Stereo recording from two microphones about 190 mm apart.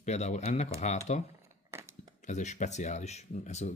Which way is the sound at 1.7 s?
15° right (ahead or behind).